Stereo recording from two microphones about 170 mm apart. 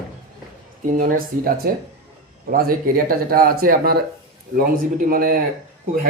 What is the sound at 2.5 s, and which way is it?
Speech, 60° right (ahead or behind).